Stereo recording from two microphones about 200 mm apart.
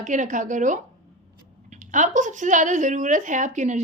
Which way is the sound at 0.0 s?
40° right (ahead or behind).